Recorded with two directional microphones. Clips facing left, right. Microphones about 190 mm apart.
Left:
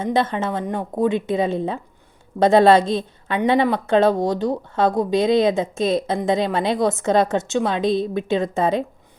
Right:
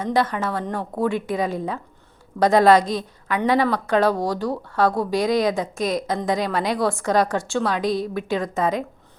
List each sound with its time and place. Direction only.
0.0 s a woman's voice: 25° left (ahead or behind)